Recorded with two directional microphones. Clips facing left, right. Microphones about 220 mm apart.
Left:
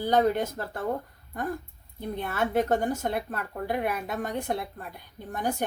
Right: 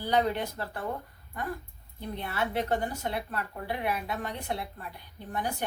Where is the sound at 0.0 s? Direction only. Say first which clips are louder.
Left 4 dB; 45° left (ahead or behind).